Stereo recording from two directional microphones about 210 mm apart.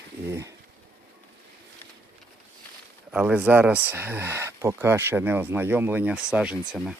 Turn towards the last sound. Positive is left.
turn(degrees=-5)  # may be behind; listen again after turning